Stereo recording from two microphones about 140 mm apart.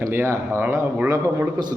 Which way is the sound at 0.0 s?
20° right (ahead or behind).